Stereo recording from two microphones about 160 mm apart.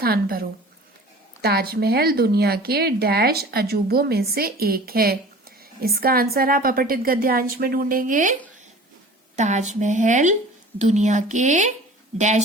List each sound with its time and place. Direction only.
0.0 s a woman's voice: 70° right (ahead or behind); by 12.4 s 45° right (ahead or behind)